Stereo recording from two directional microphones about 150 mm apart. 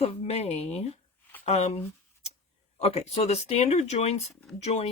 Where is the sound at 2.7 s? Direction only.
45° left (ahead or behind).